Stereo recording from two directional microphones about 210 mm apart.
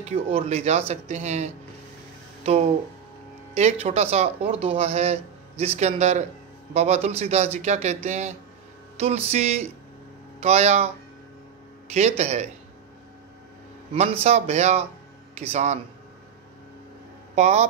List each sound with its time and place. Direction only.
0.0 s speech: 30° right (ahead or behind)
11.9 s speech: 30° right (ahead or behind)
14.2 s speech: 30° right (ahead or behind)
17.4 s speech: 30° right (ahead or behind)